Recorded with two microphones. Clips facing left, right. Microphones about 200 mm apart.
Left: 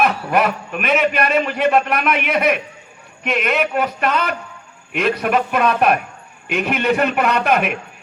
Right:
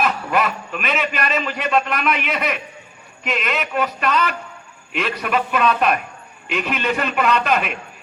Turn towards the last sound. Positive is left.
turn(degrees=60)  # may be behind; listen again after turning